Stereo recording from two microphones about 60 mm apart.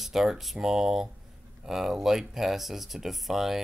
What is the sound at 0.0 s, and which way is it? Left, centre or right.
Speech, centre.